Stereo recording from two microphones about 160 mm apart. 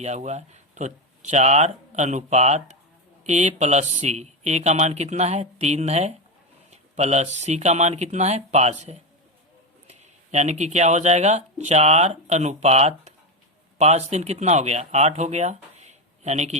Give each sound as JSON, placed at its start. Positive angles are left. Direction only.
{"t": 0.0, "sound": "speech", "side_deg": -45}